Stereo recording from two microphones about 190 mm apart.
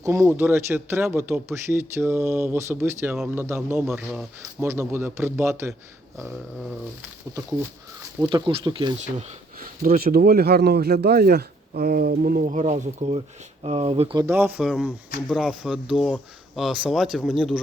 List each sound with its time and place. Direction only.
0.0 s speech: 15° right (ahead or behind)
8.2 s speech: 25° right (ahead or behind)
9.6 s speech: 50° right (ahead or behind); by 14.2 s 30° right (ahead or behind)
14.2 s speech: 10° right (ahead or behind)